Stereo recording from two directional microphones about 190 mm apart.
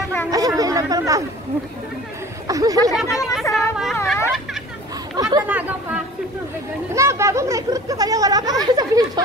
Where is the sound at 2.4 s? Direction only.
20° right (ahead or behind).